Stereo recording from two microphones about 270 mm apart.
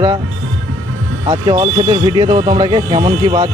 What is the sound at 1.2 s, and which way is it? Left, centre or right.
Speech, centre.